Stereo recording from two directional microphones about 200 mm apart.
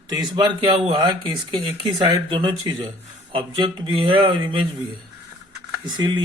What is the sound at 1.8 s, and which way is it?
Speech, 20° right (ahead or behind).